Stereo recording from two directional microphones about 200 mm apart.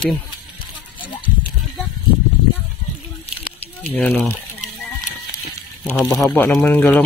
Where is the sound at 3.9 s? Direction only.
5° left (ahead or behind).